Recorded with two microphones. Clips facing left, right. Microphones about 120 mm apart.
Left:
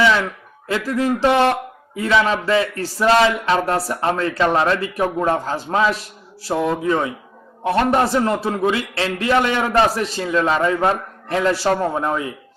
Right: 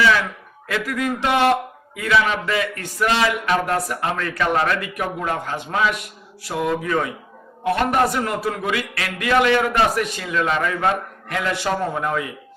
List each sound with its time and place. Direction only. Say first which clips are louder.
0.0 s a man's voice: left 1 dB; 25° left (ahead or behind)